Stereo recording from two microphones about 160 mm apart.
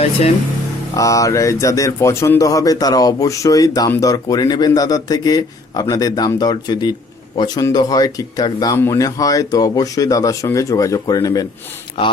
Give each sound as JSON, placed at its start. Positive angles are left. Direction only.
{"t": 0.0, "sound": "speech", "side_deg": 40}
{"t": 0.9, "sound": "speech", "side_deg": 20}